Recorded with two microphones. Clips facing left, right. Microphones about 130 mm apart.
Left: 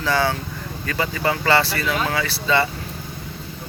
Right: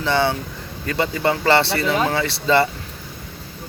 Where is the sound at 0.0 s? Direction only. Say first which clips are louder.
Right 1 dB; 25° right (ahead or behind).